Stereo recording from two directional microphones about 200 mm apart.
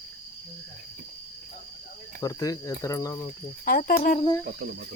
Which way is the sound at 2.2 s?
15° left (ahead or behind).